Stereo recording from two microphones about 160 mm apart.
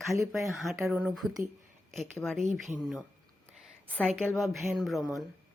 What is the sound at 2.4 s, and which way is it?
Speech, 50° right (ahead or behind).